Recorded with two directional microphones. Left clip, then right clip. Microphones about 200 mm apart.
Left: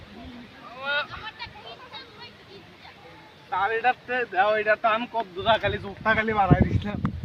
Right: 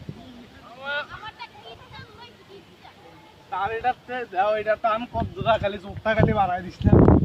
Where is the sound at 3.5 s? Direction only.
15° right (ahead or behind); by 6.6 s 35° right (ahead or behind).